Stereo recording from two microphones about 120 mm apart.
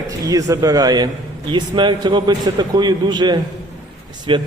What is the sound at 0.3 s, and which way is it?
A man's voice, 30° right (ahead or behind).